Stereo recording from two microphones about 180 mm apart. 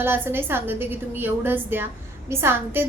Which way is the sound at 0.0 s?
10° right (ahead or behind).